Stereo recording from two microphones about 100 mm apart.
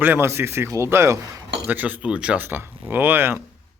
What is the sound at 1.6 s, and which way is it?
Speech, 15° right (ahead or behind).